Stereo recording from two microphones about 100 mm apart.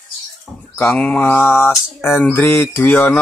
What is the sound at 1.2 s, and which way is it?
Speech, 20° left (ahead or behind).